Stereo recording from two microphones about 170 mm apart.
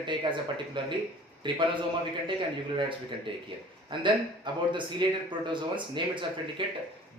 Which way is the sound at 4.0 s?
25° right (ahead or behind).